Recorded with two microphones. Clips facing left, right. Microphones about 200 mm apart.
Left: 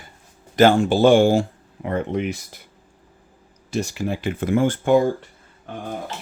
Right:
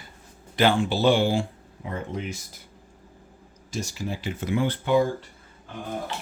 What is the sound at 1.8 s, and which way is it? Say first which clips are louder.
Speech: left 9 dB; 65° left (ahead or behind).